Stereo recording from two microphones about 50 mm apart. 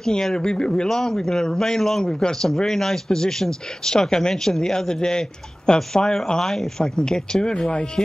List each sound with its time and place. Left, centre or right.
0.0 s speech: centre